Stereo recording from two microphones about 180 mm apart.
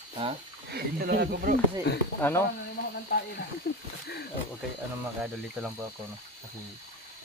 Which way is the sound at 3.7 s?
55° left (ahead or behind).